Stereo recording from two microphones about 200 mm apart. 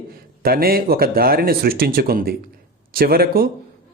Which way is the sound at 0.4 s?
50° right (ahead or behind).